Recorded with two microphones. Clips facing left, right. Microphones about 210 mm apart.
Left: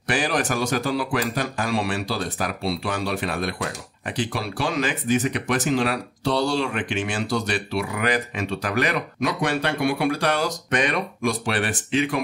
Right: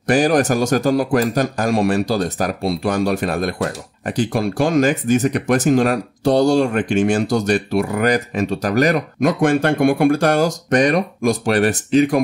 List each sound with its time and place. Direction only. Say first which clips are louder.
0.0 s a man's voice: right 9 dB; 45° right (ahead or behind)